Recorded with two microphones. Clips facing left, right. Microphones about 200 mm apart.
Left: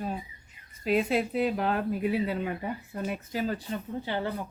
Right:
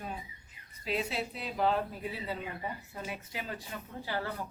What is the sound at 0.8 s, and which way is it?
Speech, 55° left (ahead or behind).